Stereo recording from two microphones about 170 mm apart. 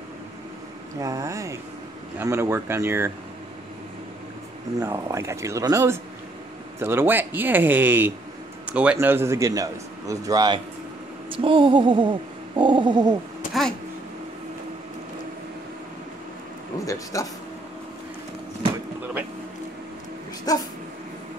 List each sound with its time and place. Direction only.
0.9 s speech: 20° right (ahead or behind)
4.7 s a man's voice: 20° right (ahead or behind)
13.5 s speech: centre (ahead or behind)
16.8 s speech: 20° left (ahead or behind)
20.5 s speech: 20° left (ahead or behind)